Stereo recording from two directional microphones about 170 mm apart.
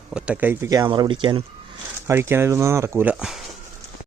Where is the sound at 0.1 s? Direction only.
10° right (ahead or behind); by 1.4 s 30° right (ahead or behind).